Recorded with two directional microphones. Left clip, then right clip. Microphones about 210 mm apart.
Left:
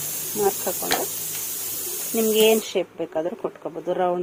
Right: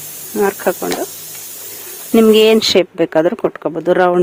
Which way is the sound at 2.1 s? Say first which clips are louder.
Right 10 dB; 55° right (ahead or behind).